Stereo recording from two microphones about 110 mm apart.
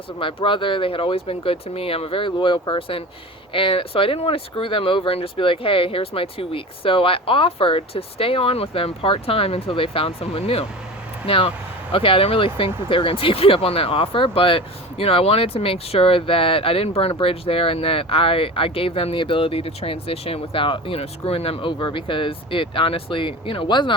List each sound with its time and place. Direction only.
0.2 s speech: 50° left (ahead or behind)